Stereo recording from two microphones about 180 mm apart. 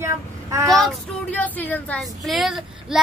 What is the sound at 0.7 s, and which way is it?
Speech, centre (ahead or behind).